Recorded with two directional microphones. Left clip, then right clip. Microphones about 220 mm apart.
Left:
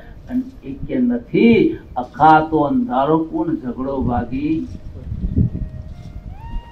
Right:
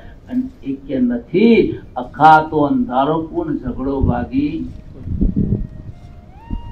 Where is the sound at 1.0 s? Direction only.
45° right (ahead or behind).